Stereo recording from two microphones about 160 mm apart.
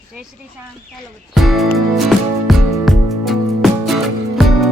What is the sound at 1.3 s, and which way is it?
Music, centre (ahead or behind).